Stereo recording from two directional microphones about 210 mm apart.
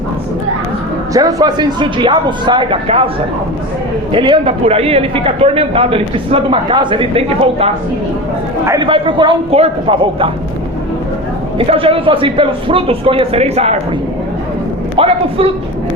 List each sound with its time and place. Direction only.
1.1 s a man's voice: 15° right (ahead or behind)
4.1 s a man's voice: 25° right (ahead or behind)
8.6 s a man's voice: 20° right (ahead or behind)
11.5 s a man's voice: 25° right (ahead or behind)
14.9 s speech: 25° right (ahead or behind)